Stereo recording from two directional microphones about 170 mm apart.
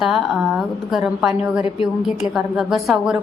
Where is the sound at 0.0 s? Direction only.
Centre (ahead or behind).